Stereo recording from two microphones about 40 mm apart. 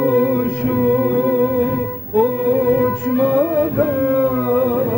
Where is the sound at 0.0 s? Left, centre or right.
Centre.